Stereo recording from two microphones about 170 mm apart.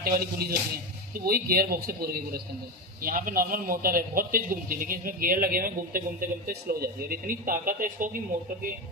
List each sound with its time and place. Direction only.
0.0 s a man's voice: 60° right (ahead or behind)